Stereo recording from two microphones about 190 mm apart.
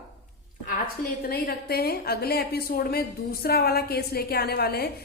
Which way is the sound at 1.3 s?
55° left (ahead or behind).